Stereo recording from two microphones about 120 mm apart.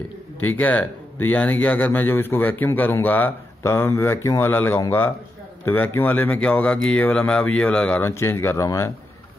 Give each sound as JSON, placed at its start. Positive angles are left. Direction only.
{"t": 0.4, "sound": "speech", "side_deg": 15}
{"t": 8.0, "sound": "speech", "side_deg": 20}